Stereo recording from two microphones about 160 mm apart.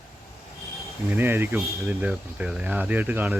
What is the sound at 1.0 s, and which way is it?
Speech, 15° right (ahead or behind).